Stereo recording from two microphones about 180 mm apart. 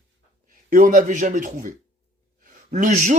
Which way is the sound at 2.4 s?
45° right (ahead or behind).